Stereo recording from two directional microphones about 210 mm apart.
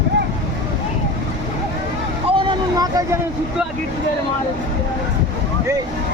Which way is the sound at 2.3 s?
20° right (ahead or behind).